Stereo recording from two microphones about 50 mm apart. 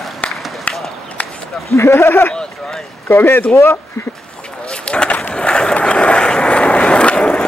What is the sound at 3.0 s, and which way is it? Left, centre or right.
Speech, left.